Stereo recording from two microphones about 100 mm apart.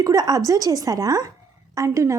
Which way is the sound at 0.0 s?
35° right (ahead or behind).